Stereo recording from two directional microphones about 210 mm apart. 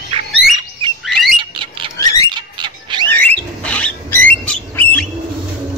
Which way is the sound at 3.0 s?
5° left (ahead or behind).